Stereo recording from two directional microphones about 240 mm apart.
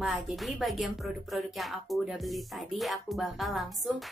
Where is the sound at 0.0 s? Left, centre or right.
Centre.